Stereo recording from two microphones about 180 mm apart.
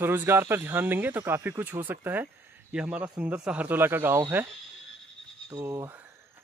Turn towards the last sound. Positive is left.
turn(degrees=-15)  # may be behind; listen again after turning